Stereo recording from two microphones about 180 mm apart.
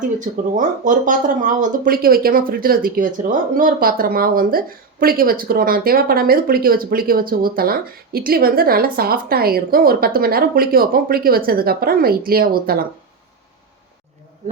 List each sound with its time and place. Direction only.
0.2 s a woman's voice: 45° right (ahead or behind)